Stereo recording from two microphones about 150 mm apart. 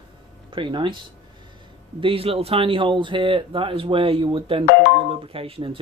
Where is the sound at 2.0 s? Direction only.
35° right (ahead or behind).